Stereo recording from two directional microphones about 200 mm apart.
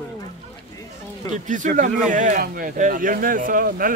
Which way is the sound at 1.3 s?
40° right (ahead or behind).